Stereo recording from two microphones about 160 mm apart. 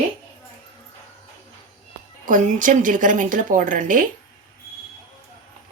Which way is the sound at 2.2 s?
55° right (ahead or behind).